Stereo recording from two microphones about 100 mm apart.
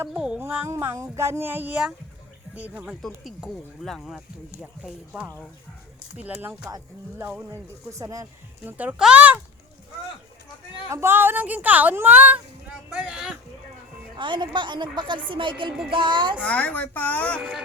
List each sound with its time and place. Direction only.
0.2 s speech: 10° right (ahead or behind)
0.4 s child singing: 20° right (ahead or behind)
2.6 s a woman's voice: 15° right (ahead or behind)
3.0 s a woman's voice: centre (ahead or behind); by 6.6 s 15° right (ahead or behind)
7.2 s child singing: 20° right (ahead or behind)
7.9 s speech: 30° right (ahead or behind)
8.6 s a woman's voice: 15° right (ahead or behind)
10.8 s a woman's voice: 25° right (ahead or behind); by 13.3 s 10° right (ahead or behind)
14.2 s a woman's voice: 50° right (ahead or behind)
16.4 s a woman's voice: 15° left (ahead or behind)